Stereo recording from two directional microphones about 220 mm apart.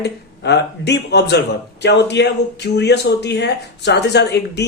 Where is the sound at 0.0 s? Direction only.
50° left (ahead or behind).